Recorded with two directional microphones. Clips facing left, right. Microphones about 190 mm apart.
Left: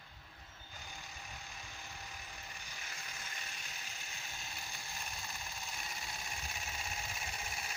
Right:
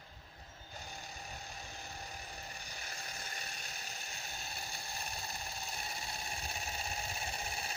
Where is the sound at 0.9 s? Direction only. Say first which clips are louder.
Right 3 dB; 35° right (ahead or behind).